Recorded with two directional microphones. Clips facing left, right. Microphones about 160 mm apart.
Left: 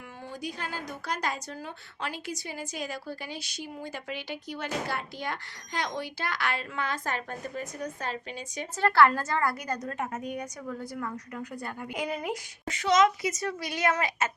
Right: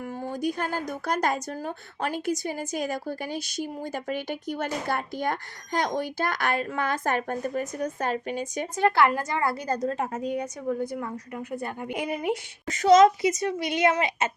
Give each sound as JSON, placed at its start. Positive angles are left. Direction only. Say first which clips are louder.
{"t": 0.3, "sound": "a woman's voice", "louder": "right 8 dB", "side_deg": -50}
{"t": 8.7, "sound": "a woman's voice", "louder": "even", "side_deg": -15}
{"t": 12.6, "sound": "a woman's voice", "louder": "right 7 dB", "side_deg": -40}
{"t": 13.2, "sound": "a woman's voice", "louder": "right 6 dB", "side_deg": -20}